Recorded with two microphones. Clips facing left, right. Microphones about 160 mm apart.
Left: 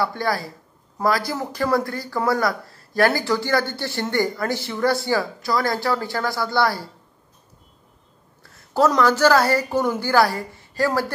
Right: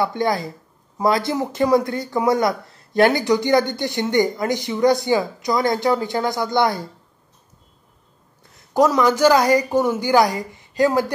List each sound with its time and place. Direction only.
0.0 s speech: 20° right (ahead or behind)
8.4 s speech: 15° right (ahead or behind)